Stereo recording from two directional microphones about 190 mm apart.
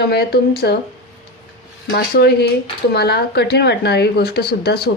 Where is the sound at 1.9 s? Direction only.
60° left (ahead or behind).